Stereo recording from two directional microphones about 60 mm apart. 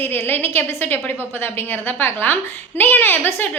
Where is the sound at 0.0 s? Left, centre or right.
Left.